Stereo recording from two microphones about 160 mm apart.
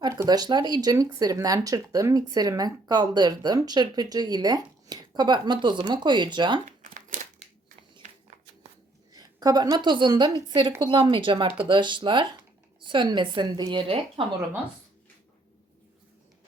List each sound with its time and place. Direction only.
0.0 s speech: 20° right (ahead or behind)
6.7 s crumpling: 50° right (ahead or behind)
9.1 s a woman's voice: 25° right (ahead or behind)